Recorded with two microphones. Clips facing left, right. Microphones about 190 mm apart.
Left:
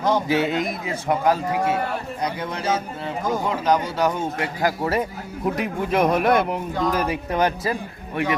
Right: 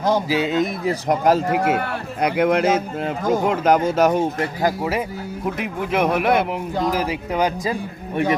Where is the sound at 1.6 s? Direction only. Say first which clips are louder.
Right 2 dB; 60° right (ahead or behind); by 2.7 s 75° right (ahead or behind).